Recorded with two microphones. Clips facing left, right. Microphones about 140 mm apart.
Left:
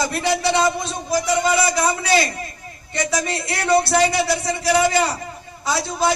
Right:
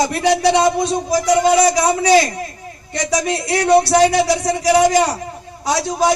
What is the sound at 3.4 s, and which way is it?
A man's voice, 40° right (ahead or behind).